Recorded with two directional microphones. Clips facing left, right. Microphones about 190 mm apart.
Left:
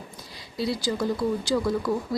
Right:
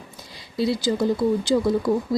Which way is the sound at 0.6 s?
25° right (ahead or behind).